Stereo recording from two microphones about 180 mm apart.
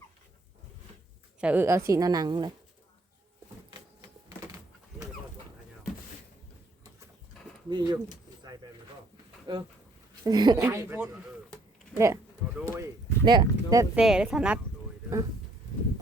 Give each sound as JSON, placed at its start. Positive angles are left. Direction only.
{"t": 1.4, "sound": "a woman's voice", "side_deg": -10}
{"t": 4.3, "sound": "door", "side_deg": -20}
{"t": 7.7, "sound": "speech", "side_deg": -25}
{"t": 8.6, "sound": "a sound", "side_deg": -25}
{"t": 9.5, "sound": "a woman's voice", "side_deg": -25}
{"t": 11.9, "sound": "a sound", "side_deg": -15}
{"t": 12.7, "sound": "speech", "side_deg": -20}
{"t": 13.9, "sound": "speech", "side_deg": -5}